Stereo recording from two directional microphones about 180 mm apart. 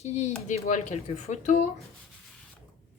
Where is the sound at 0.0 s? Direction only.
40° left (ahead or behind).